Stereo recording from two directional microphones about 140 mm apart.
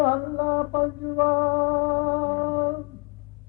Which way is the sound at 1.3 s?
40° right (ahead or behind).